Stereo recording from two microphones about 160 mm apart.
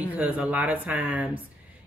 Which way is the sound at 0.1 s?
10° right (ahead or behind).